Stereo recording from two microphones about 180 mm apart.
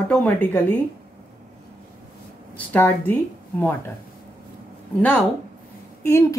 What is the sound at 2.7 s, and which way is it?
Speech, 10° left (ahead or behind).